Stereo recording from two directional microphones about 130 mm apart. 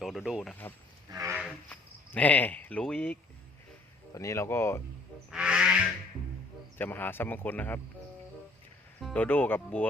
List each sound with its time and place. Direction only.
0.0 s speech: centre (ahead or behind)
1.1 s a sound: 25° right (ahead or behind)
1.7 s speech: 10° left (ahead or behind)
4.1 s speech: 25° left (ahead or behind)
5.3 s a sound: 5° right (ahead or behind)
6.7 s speech: 15° left (ahead or behind)
9.1 s speech: 15° left (ahead or behind)